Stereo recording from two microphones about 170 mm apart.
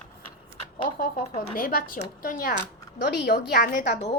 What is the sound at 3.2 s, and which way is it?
Speech, 65° left (ahead or behind).